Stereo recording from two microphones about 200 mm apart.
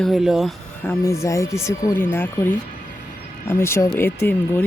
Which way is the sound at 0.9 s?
15° left (ahead or behind).